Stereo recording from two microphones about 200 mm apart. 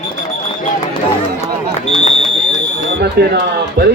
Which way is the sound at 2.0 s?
35° left (ahead or behind).